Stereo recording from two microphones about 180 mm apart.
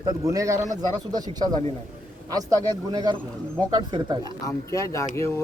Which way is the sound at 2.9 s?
25° right (ahead or behind).